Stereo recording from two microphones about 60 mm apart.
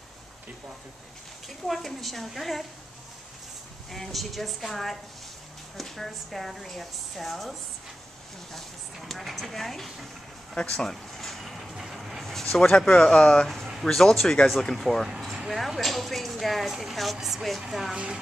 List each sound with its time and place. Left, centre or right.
1.7 s a woman's voice: centre
3.9 s a woman's voice: centre
8.5 s a woman's voice: centre
10.5 s vehicle: centre
13.8 s a woman's voice: centre
17.9 s speech: centre